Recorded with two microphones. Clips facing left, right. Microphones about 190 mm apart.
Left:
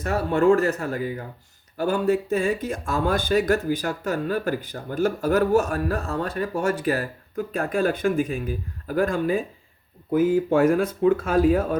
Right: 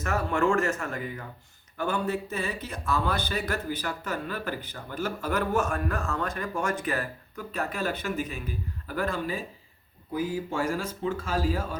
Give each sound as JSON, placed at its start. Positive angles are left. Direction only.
{"t": 0.0, "sound": "speech", "side_deg": 35}